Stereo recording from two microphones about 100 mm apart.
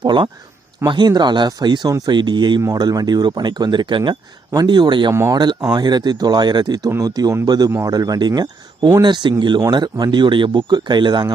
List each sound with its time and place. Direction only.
0.0 s speech: 50° right (ahead or behind)
2.6 s speech: 40° right (ahead or behind)